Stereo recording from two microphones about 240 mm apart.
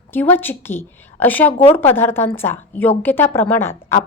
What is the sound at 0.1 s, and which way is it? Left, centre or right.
A woman's voice, centre.